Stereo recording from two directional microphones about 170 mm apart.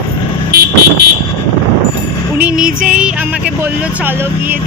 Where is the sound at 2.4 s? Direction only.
5° right (ahead or behind).